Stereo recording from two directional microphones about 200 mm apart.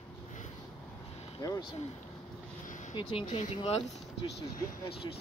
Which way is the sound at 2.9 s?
25° left (ahead or behind).